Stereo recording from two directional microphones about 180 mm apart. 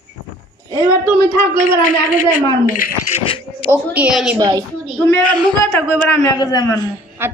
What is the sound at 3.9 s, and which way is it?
Speech, 5° right (ahead or behind).